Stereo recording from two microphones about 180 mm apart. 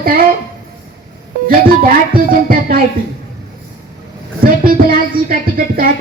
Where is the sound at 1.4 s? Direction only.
55° right (ahead or behind).